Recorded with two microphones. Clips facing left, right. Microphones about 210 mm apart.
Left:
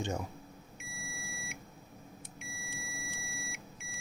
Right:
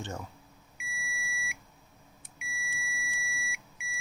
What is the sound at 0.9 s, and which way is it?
Beep, 40° left (ahead or behind).